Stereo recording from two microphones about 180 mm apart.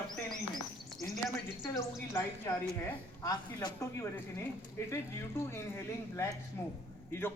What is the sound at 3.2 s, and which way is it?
A man's voice, 20° left (ahead or behind).